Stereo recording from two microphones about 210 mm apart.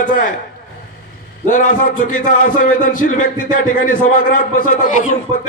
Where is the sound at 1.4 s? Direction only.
35° left (ahead or behind).